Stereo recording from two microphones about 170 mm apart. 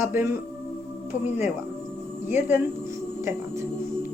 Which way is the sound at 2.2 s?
10° right (ahead or behind).